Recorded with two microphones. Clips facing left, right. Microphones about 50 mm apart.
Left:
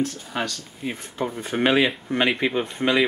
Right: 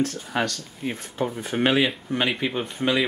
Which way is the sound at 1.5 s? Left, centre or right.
Centre.